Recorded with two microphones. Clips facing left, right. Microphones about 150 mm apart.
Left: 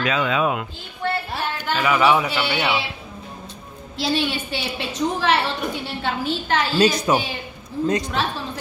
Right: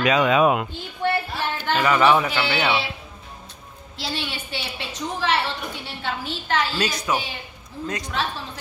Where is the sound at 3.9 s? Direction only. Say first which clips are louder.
Left 8 dB; 15° left (ahead or behind).